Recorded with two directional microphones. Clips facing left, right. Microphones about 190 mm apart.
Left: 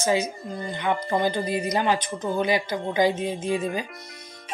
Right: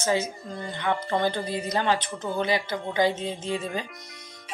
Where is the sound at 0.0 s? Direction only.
15° left (ahead or behind).